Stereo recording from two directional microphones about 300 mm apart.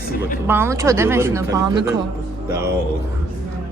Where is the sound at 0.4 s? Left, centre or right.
Centre.